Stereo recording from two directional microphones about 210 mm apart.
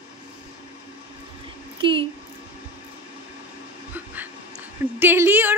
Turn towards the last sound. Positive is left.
turn(degrees=-10)  # may be behind; listen again after turning